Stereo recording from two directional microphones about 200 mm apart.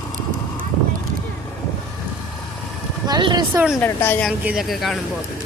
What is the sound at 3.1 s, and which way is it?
Speech, 20° right (ahead or behind).